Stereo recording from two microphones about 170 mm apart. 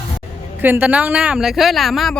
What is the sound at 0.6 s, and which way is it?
Speech, 10° right (ahead or behind).